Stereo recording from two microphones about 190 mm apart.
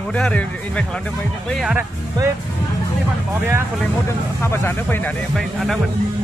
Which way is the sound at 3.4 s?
10° right (ahead or behind).